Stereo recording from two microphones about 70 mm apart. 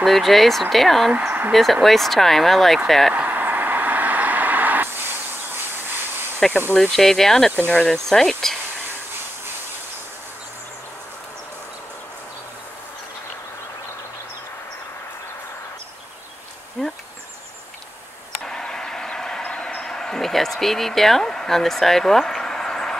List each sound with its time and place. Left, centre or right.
0.0 s speech: centre
1.1 s speech: right
1.5 s speech: centre
3.2 s vehicle: right
6.7 s speech: centre
7.5 s speech: left
8.1 s speech: centre
16.8 s insect: centre
18.4 s a sound: centre